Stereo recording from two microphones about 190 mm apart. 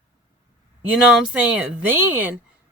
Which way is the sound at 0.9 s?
5° right (ahead or behind).